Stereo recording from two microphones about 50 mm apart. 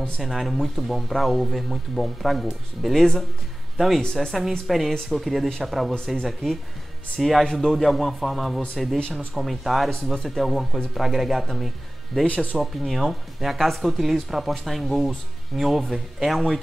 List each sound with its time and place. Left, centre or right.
0.2 s speech: centre